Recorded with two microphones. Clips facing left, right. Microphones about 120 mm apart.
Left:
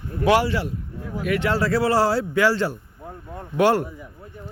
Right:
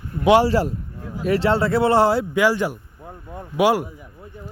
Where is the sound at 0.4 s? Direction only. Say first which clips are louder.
Right 6 dB; 40° right (ahead or behind); by 3.8 s 10° right (ahead or behind).